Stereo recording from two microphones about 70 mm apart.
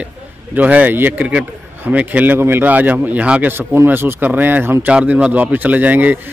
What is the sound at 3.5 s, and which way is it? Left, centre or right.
Speech, right.